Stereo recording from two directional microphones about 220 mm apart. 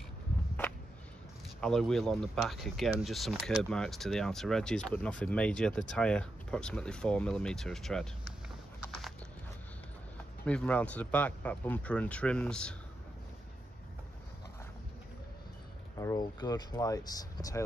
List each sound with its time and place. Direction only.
1.6 s speech: centre (ahead or behind)
10.4 s speech: 5° left (ahead or behind)
16.0 s speech: 15° left (ahead or behind)